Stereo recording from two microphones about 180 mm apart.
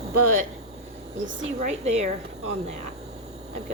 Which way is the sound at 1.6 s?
40° right (ahead or behind).